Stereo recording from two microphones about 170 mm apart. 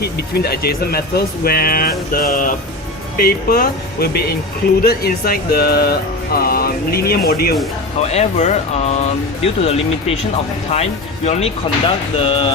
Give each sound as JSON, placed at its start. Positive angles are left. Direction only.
{"t": 0.0, "sound": "speech", "side_deg": 70}
{"t": 8.0, "sound": "speech", "side_deg": 40}